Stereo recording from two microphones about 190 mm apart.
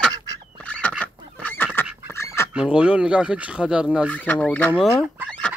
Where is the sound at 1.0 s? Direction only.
10° left (ahead or behind).